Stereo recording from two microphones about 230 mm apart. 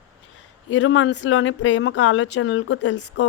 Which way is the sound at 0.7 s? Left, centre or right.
Left.